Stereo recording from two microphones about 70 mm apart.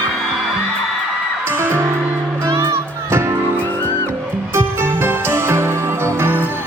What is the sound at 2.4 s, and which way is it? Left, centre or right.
Music, right.